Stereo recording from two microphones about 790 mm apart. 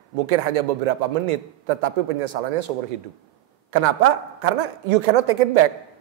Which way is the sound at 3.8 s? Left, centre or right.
Right.